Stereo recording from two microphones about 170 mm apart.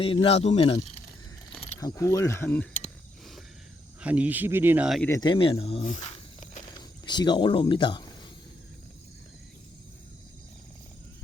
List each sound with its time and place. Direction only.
0.0 s speech: 35° left (ahead or behind)
1.8 s speech: 20° left (ahead or behind)
4.0 s speech: 10° right (ahead or behind)
5.0 s speech: 20° left (ahead or behind)
5.8 s snake: 45° left (ahead or behind)
7.0 s speech: 25° left (ahead or behind)